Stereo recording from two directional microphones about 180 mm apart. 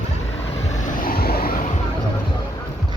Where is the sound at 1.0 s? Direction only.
55° left (ahead or behind).